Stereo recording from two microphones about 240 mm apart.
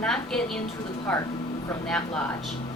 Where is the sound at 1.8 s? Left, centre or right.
Centre.